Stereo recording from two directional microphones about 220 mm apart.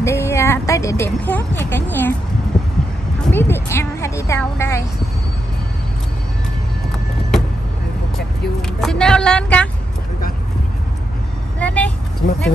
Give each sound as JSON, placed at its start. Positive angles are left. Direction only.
{"t": 0.0, "sound": "speech", "side_deg": 10}
{"t": 3.3, "sound": "speech", "side_deg": 10}
{"t": 8.8, "sound": "speech", "side_deg": 5}
{"t": 11.6, "sound": "speech", "side_deg": 5}
{"t": 12.2, "sound": "speech", "side_deg": 35}